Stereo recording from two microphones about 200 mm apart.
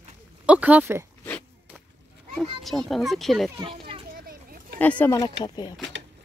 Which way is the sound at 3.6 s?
25° right (ahead or behind).